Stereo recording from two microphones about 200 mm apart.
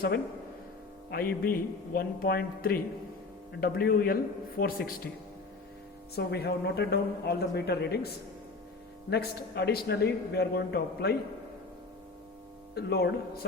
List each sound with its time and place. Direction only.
1.1 s speech: 45° left (ahead or behind)
6.1 s a man's voice: 55° left (ahead or behind)
12.7 s a man's voice: 55° left (ahead or behind)